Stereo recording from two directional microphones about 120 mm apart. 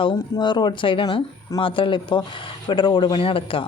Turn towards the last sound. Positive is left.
turn(degrees=50)  # may be behind; listen again after turning